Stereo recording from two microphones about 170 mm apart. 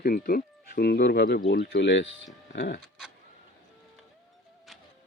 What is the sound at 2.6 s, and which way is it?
Speech, 70° left (ahead or behind).